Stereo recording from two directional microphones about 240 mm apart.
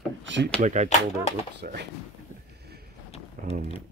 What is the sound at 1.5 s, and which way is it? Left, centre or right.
Speech, right.